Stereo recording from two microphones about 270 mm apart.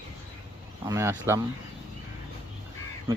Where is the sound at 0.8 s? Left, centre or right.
Centre.